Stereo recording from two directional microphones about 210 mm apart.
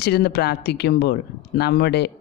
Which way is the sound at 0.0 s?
50° left (ahead or behind).